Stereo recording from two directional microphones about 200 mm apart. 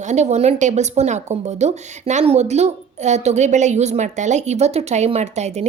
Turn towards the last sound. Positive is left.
turn(degrees=-35)  # may be behind; listen again after turning